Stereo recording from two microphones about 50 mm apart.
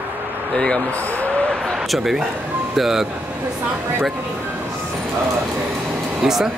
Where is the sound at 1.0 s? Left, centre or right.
Left.